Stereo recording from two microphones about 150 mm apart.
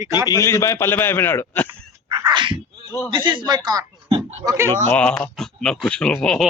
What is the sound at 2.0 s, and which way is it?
Sneeze, 30° right (ahead or behind).